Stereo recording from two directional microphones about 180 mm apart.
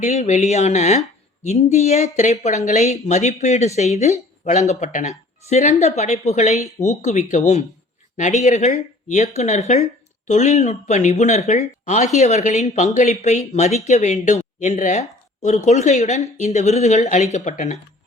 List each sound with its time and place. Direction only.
0.0 s speech: 40° left (ahead or behind)